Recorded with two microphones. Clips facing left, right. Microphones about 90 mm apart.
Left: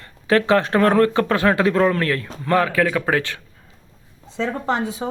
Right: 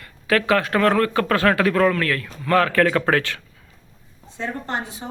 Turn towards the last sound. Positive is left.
turn(degrees=90)